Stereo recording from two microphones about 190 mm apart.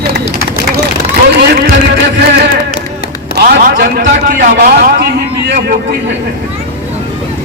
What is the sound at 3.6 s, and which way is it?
A man's voice, 50° right (ahead or behind).